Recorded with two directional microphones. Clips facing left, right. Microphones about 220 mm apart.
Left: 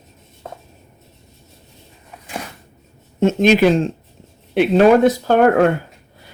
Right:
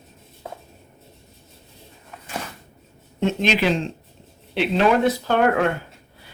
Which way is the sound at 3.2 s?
45° left (ahead or behind).